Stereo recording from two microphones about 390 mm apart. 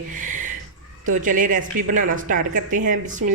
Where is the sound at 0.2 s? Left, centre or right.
Centre.